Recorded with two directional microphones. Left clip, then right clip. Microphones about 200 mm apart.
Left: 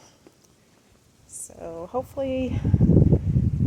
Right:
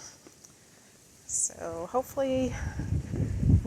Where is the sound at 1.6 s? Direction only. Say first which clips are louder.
Left 3 dB; 5° left (ahead or behind).